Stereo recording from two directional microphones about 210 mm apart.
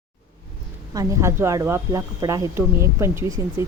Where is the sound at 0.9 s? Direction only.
15° right (ahead or behind).